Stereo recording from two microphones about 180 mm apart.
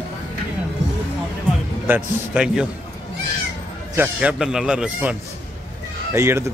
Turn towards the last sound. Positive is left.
turn(degrees=-15)  # may be behind; listen again after turning